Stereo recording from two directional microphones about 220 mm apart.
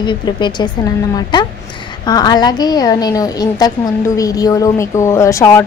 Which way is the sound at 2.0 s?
20° left (ahead or behind).